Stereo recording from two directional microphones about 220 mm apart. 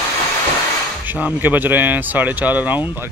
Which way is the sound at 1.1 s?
10° right (ahead or behind).